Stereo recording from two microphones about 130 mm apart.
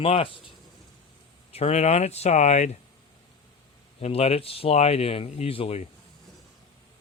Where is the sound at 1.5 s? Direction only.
55° left (ahead or behind).